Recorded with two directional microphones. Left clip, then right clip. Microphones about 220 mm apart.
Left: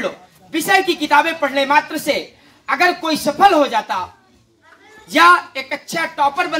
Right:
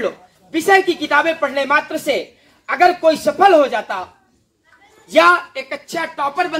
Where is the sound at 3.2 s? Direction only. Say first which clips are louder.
Left 1 dB; 35° left (ahead or behind).